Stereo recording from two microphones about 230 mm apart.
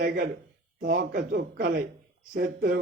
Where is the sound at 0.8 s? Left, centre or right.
Right.